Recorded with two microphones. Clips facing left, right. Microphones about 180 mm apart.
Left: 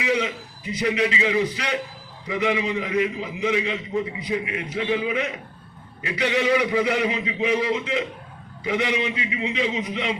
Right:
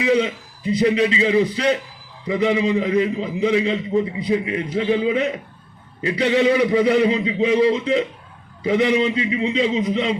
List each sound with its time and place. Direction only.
0.0 s a man's voice: 35° right (ahead or behind)